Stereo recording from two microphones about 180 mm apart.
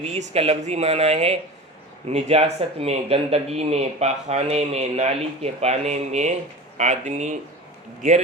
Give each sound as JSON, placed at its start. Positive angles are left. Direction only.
{"t": 0.0, "sound": "speech", "side_deg": -35}